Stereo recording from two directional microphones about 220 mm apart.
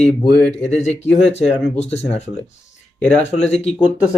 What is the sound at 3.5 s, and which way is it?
Speech, 30° left (ahead or behind).